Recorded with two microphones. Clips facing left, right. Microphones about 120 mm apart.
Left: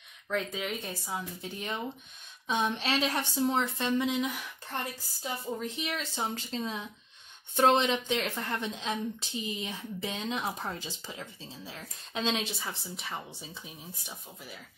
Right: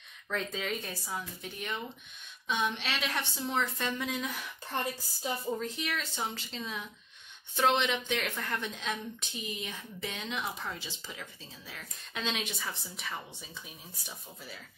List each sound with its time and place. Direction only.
0.3 s a woman's voice: 10° left (ahead or behind)
5.7 s a woman's voice: 20° left (ahead or behind)
6.2 s a woman's voice: 35° left (ahead or behind); by 14.6 s 15° left (ahead or behind)